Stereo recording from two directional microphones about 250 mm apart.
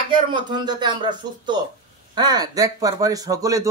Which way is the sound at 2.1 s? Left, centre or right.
Centre.